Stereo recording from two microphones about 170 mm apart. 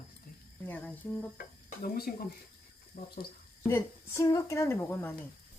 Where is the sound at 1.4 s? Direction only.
60° left (ahead or behind).